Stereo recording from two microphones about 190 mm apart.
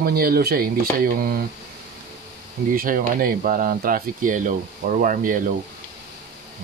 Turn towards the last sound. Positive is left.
turn(degrees=-45)  # may be behind; listen again after turning